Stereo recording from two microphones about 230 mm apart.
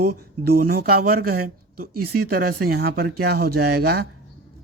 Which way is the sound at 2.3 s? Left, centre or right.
Right.